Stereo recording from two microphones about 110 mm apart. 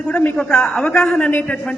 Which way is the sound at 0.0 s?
10° left (ahead or behind).